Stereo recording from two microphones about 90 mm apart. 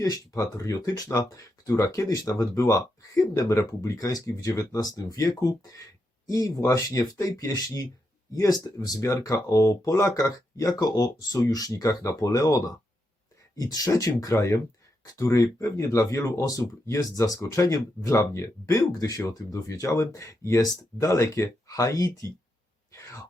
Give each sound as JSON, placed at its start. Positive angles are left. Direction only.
{"t": 0.0, "sound": "speech", "side_deg": 40}
{"t": 22.9, "sound": "throat clearing", "side_deg": 35}